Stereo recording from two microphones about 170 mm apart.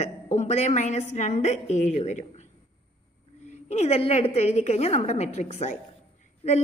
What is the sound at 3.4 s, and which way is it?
A woman's voice, 40° left (ahead or behind).